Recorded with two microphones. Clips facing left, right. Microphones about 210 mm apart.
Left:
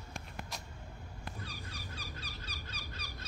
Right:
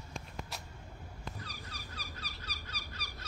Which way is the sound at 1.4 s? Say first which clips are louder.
Left 2 dB; 25° left (ahead or behind).